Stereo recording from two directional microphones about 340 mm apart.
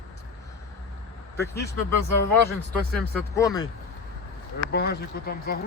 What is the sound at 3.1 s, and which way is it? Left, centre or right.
Speech, centre.